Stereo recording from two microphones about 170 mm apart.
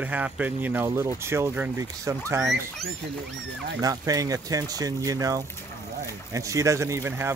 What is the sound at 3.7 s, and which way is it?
Speech, 20° right (ahead or behind).